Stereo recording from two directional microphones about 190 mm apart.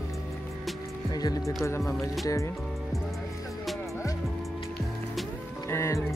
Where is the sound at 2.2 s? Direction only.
15° left (ahead or behind).